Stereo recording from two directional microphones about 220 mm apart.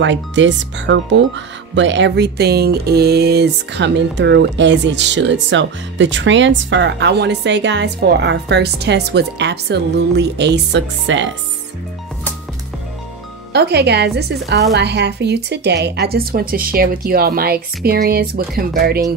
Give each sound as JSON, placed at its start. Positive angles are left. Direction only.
{"t": 0.0, "sound": "speech", "side_deg": -55}
{"t": 13.5, "sound": "speech", "side_deg": -50}